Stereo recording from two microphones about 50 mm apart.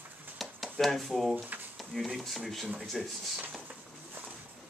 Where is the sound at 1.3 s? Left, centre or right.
Right.